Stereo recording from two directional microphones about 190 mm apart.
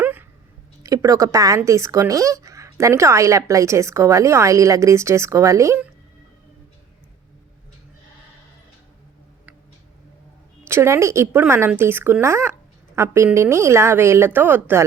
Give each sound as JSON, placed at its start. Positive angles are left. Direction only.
{"t": 0.0, "sound": "a sound", "side_deg": -10}
{"t": 0.8, "sound": "speech", "side_deg": -20}
{"t": 10.6, "sound": "speech", "side_deg": -15}